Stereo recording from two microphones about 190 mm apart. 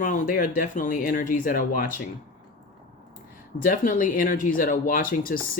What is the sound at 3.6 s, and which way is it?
Speech, 45° left (ahead or behind).